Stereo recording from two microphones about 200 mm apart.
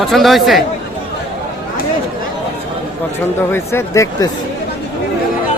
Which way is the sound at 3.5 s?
15° left (ahead or behind).